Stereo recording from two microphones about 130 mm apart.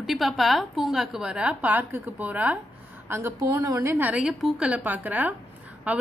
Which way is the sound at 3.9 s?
10° right (ahead or behind).